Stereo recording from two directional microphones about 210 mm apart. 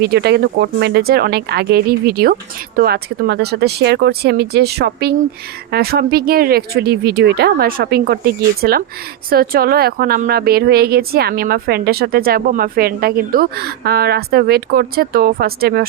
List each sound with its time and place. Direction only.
0.0 s speech: 50° right (ahead or behind)